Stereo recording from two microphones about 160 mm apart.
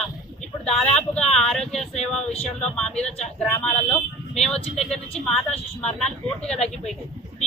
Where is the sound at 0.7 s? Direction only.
5° left (ahead or behind).